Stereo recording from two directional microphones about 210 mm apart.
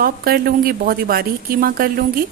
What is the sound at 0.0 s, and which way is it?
A woman's voice, 45° right (ahead or behind).